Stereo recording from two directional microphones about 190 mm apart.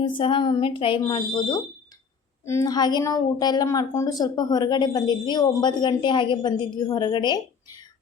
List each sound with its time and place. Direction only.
0.0 s a woman's voice: 25° left (ahead or behind)